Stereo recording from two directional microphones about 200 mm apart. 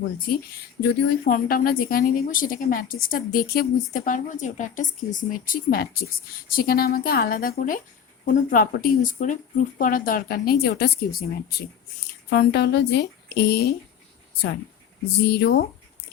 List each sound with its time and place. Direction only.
0.8 s a woman's voice: 40° left (ahead or behind)
12.3 s a woman's voice: 50° left (ahead or behind)
15.2 s a woman's voice: 55° left (ahead or behind)